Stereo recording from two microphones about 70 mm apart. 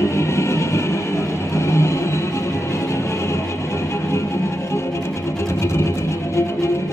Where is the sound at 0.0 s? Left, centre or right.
Left.